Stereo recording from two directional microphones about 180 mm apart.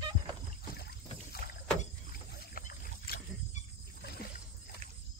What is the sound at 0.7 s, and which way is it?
Boat, 60° left (ahead or behind).